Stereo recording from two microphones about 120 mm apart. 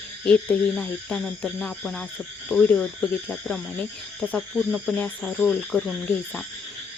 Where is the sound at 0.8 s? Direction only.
5° left (ahead or behind).